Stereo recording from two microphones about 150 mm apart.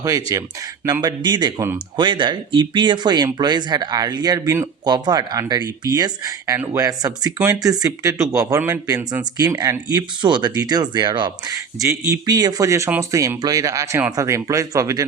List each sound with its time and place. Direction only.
0.3 s speech: 20° right (ahead or behind)
9.4 s speech: 25° right (ahead or behind)